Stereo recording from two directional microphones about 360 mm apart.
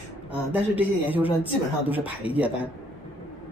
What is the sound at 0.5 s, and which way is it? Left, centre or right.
Speech, centre.